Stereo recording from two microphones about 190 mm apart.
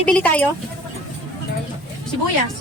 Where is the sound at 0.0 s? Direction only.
5° left (ahead or behind).